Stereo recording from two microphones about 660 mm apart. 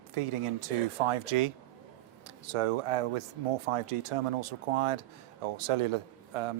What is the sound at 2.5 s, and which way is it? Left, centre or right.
Speech, right.